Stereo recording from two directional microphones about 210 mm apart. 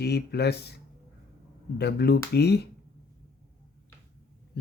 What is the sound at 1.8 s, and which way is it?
Speech, 50° left (ahead or behind).